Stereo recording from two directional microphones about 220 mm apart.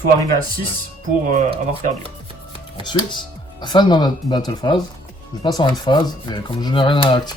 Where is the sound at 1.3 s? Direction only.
30° right (ahead or behind).